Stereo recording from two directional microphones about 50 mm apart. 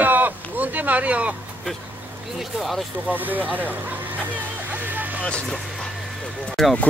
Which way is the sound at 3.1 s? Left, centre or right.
Right.